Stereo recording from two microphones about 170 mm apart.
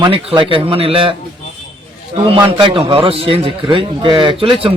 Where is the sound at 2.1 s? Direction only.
30° right (ahead or behind).